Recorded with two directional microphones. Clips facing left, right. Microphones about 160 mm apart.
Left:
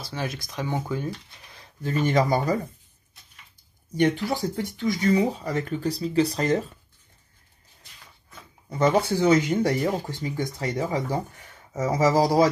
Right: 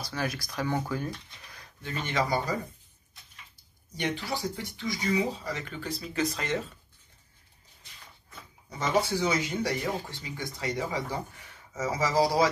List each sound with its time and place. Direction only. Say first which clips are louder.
0.0 s speech: left 1 dB; 25° left (ahead or behind)
1.8 s speech: left 8 dB; 45° left (ahead or behind)
4.3 s speech: left 6 dB; 50° left (ahead or behind)
8.6 s speech: left 6 dB; 50° left (ahead or behind)